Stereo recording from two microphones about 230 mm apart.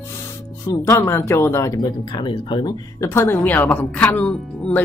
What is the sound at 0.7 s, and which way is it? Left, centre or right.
Speech, centre.